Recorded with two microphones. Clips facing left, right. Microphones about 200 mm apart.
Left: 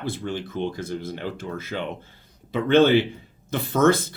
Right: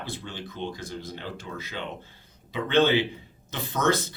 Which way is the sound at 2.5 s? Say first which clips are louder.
Left 5 dB; 50° left (ahead or behind).